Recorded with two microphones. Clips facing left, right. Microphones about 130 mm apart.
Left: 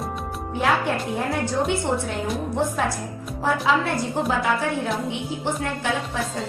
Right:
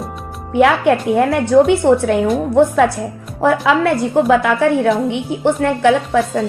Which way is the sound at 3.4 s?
65° right (ahead or behind).